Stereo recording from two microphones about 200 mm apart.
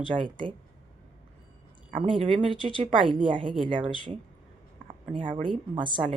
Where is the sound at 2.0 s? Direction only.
25° right (ahead or behind).